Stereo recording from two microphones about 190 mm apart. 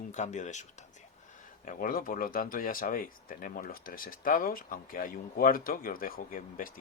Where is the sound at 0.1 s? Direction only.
40° left (ahead or behind).